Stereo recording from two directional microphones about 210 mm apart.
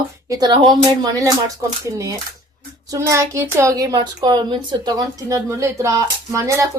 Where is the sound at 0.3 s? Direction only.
20° right (ahead or behind).